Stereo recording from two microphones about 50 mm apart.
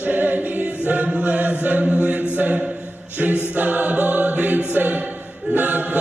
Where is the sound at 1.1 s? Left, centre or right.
Right.